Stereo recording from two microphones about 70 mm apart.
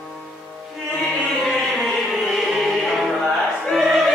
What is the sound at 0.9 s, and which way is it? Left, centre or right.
Music, centre.